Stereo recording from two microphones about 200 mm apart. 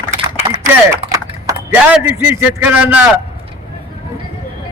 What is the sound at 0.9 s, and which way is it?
Typing, 15° right (ahead or behind).